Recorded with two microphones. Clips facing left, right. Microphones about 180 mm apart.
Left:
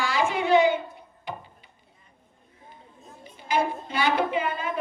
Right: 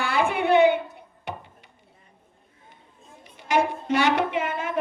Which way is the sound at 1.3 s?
70° right (ahead or behind).